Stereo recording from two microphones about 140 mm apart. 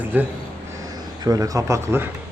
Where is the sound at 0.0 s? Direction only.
15° right (ahead or behind).